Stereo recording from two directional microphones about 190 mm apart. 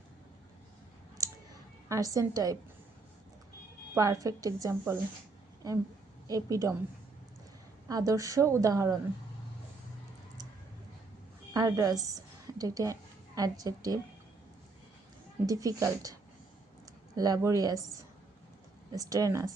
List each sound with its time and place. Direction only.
1.2 s a sound: 15° right (ahead or behind)
1.9 s a woman's voice: 15° right (ahead or behind)
3.9 s speech: 15° right (ahead or behind)
6.2 s speech: 20° right (ahead or behind)
7.9 s speech: 20° right (ahead or behind)
11.5 s a woman's voice: 20° right (ahead or behind)
15.4 s speech: 20° right (ahead or behind)
17.2 s a woman's voice: 20° right (ahead or behind)
18.9 s speech: 20° right (ahead or behind)